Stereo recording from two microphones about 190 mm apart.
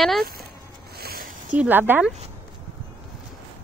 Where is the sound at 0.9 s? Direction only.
55° right (ahead or behind).